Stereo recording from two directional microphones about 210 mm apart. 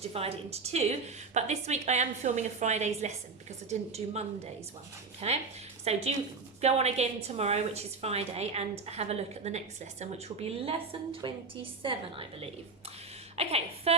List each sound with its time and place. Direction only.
0.0 s a woman's voice: 30° right (ahead or behind)